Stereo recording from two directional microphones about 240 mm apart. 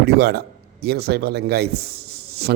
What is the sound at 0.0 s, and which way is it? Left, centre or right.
A man's voice, right.